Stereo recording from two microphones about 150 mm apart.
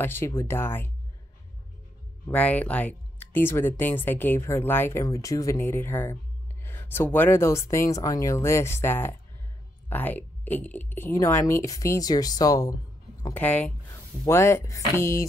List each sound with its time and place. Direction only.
0.0 s speech: 15° left (ahead or behind)
2.2 s speech: 10° left (ahead or behind)
13.2 s speech: 10° left (ahead or behind)